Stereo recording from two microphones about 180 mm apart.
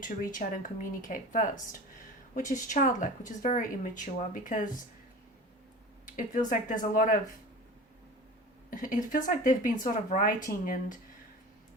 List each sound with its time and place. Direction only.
0.0 s a woman's voice: 50° left (ahead or behind)
6.1 s a woman's voice: 45° left (ahead or behind)
8.7 s a woman's voice: 50° left (ahead or behind)